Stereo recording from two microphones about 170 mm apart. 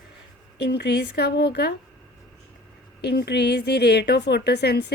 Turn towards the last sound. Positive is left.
turn(degrees=75)  # may be behind; listen again after turning